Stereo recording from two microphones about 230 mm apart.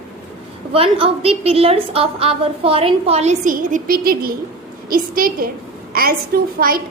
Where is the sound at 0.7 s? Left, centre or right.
Right.